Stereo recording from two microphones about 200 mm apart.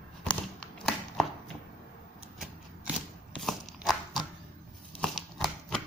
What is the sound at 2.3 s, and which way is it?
Shuffling cards, centre (ahead or behind).